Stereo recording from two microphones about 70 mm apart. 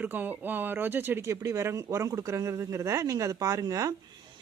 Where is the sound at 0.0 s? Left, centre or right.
Right.